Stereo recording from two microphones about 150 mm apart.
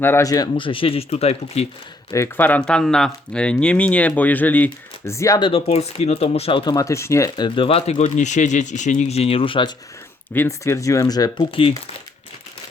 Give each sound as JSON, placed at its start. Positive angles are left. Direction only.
{"t": 0.0, "sound": "speech", "side_deg": 20}
{"t": 2.0, "sound": "speech", "side_deg": 20}
{"t": 5.4, "sound": "speech", "side_deg": 40}
{"t": 10.3, "sound": "speech", "side_deg": 15}